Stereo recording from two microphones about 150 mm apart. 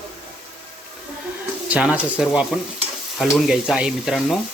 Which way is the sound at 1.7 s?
10° right (ahead or behind).